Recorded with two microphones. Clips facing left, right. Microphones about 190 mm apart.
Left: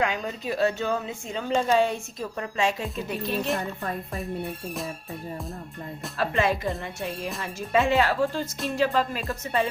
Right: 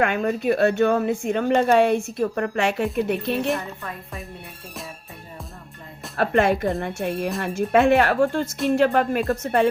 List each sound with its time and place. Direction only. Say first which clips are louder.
0.0 s a woman's voice: right 6 dB; 60° right (ahead or behind)
6.1 s a woman's voice: right 6 dB; 60° right (ahead or behind)